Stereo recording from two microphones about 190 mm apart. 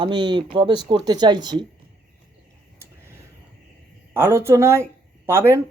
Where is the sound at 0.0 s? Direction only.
25° right (ahead or behind).